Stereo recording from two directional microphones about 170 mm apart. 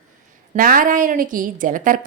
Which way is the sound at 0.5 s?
55° right (ahead or behind).